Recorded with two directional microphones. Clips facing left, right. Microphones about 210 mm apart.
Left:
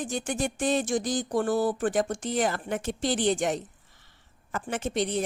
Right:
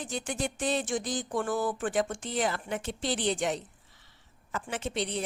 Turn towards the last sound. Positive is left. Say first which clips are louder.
# left 5 dB
turn(degrees=45)  # may be behind; listen again after turning